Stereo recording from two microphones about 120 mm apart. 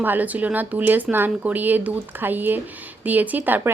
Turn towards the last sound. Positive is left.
turn(degrees=-15)  # may be behind; listen again after turning